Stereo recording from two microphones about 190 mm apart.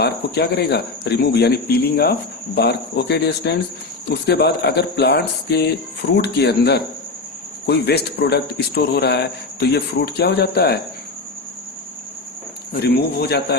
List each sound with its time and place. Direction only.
0.0 s a man's voice: 60° left (ahead or behind)
12.7 s a man's voice: 55° left (ahead or behind)